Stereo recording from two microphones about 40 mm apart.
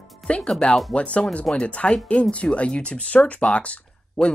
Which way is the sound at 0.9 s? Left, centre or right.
Left.